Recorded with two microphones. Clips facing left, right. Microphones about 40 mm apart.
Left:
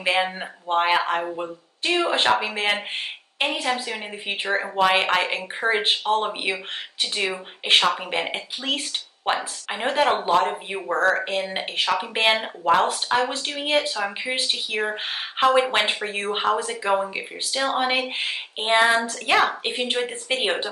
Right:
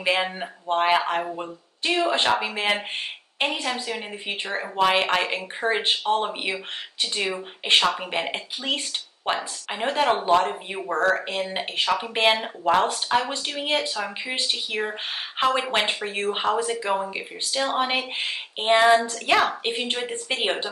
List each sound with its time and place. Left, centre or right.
0.0 s speech: centre
2.5 s speech: centre
7.6 s speech: centre